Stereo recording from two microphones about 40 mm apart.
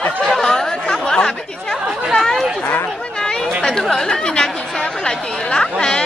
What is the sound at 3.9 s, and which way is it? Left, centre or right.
Speech, centre.